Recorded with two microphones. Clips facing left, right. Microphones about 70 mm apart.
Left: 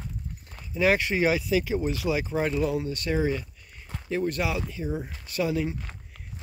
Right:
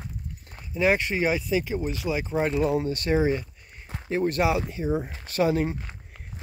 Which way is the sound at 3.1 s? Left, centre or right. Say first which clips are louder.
Right 4 dB; right.